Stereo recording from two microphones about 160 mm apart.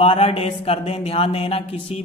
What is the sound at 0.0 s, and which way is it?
Speech, 35° left (ahead or behind).